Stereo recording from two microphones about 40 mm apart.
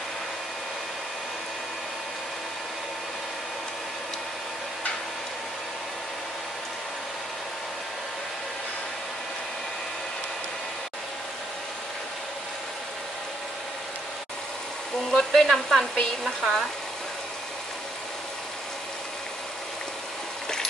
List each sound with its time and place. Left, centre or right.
15.0 s frying: centre